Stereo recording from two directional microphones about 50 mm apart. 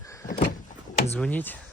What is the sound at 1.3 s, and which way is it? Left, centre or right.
Speech, left.